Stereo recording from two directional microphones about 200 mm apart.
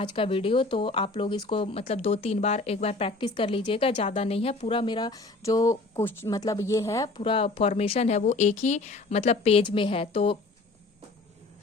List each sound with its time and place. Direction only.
0.0 s speech: 25° left (ahead or behind)
7.2 s speech: 30° left (ahead or behind)